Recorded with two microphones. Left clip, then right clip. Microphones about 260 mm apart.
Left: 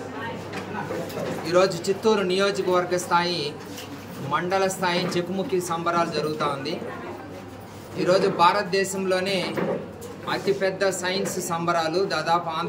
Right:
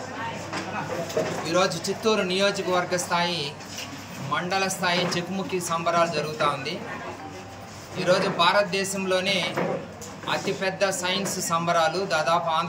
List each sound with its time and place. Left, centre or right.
1.5 s speech: centre
8.0 s speech: centre